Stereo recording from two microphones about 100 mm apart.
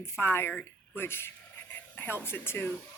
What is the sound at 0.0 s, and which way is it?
Speech, 25° left (ahead or behind).